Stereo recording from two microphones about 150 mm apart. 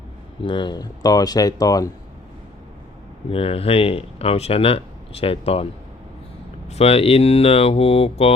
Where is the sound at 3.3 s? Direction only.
40° left (ahead or behind).